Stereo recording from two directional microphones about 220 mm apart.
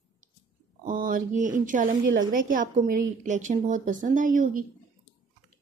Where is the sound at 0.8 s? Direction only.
40° right (ahead or behind).